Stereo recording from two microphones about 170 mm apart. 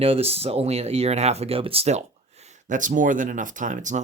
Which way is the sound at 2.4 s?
50° right (ahead or behind).